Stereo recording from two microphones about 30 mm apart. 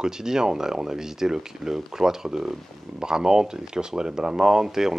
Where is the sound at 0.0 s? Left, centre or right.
Right.